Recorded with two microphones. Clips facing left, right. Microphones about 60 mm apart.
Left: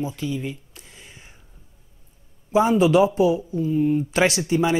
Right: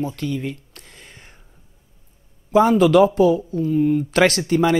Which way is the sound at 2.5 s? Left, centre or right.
Right.